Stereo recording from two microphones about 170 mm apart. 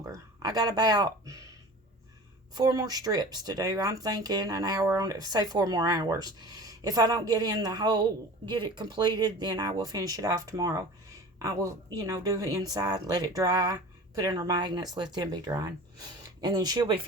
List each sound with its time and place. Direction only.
0.0 s speech: 20° right (ahead or behind)
2.6 s speech: 20° right (ahead or behind)
11.9 s speech: 20° right (ahead or behind)